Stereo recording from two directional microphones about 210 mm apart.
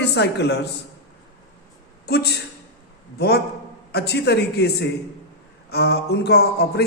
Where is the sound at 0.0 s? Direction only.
55° left (ahead or behind).